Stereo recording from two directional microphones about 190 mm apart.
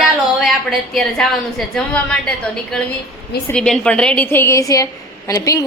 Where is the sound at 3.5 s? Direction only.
5° left (ahead or behind).